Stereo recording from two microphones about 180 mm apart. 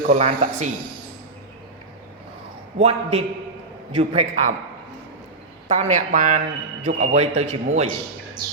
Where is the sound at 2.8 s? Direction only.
35° right (ahead or behind).